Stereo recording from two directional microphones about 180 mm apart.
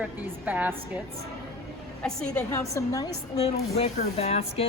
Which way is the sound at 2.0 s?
5° left (ahead or behind).